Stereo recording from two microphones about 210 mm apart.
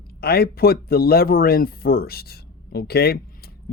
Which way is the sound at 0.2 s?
50° left (ahead or behind).